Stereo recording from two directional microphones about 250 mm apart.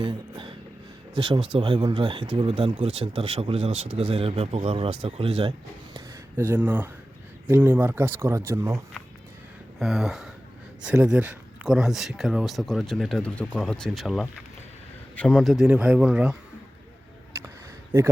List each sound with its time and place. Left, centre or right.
0.0 s music: centre
1.1 s speech: centre
6.3 s speech: centre